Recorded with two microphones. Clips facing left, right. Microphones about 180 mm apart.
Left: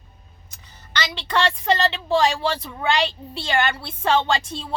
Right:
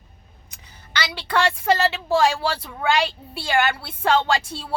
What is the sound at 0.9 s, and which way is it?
Speech, 10° right (ahead or behind).